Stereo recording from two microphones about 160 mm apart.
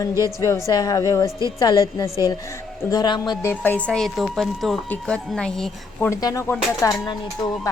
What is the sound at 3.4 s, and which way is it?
Speech, 10° left (ahead or behind).